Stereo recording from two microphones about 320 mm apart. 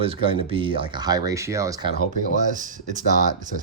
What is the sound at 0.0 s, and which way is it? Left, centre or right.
Speech, centre.